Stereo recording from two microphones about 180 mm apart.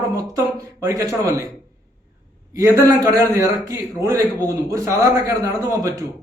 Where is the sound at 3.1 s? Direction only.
20° right (ahead or behind).